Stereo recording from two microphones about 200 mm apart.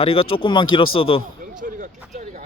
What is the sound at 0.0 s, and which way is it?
Speech, 25° left (ahead or behind).